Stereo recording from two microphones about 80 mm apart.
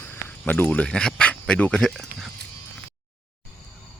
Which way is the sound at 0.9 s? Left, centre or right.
Centre.